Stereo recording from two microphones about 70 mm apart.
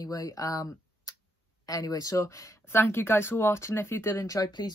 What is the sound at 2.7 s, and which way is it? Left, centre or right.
Speech, left.